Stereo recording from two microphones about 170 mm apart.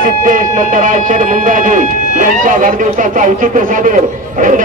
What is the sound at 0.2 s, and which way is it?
A man's voice, 50° right (ahead or behind).